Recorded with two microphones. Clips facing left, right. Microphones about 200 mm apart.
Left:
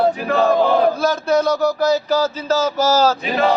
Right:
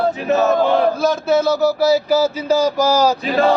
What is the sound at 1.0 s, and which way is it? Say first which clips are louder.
Speech: right 1 dB; centre (ahead or behind).